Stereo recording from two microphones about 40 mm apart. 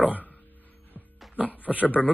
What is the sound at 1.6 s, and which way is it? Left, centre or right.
Speech, right.